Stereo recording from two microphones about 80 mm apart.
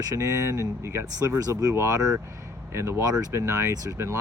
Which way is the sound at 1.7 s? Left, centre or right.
Right.